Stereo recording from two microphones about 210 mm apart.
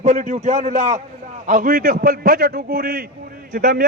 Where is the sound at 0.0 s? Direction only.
35° right (ahead or behind).